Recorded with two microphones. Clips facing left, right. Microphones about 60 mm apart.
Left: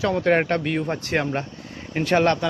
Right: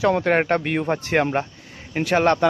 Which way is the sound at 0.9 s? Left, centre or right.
Right.